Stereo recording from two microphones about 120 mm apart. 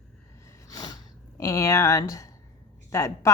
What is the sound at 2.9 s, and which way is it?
Speech, 25° left (ahead or behind).